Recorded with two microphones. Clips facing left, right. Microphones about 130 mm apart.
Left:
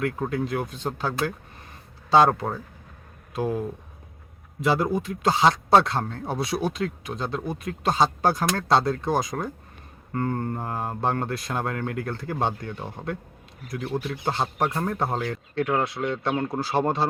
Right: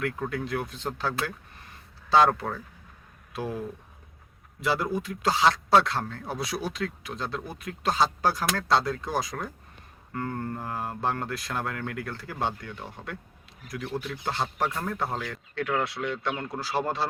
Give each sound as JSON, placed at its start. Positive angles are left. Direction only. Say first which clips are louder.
{"t": 0.0, "sound": "speech", "louder": "left 4 dB", "side_deg": 25}
{"t": 4.6, "sound": "speech", "louder": "left 4 dB", "side_deg": 20}
{"t": 10.1, "sound": "speech", "louder": "left 5 dB", "side_deg": 30}